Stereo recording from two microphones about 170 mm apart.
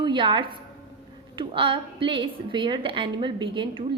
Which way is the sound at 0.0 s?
30° right (ahead or behind).